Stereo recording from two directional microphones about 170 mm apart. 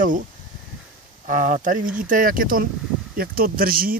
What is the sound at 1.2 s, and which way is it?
Speech, 50° right (ahead or behind).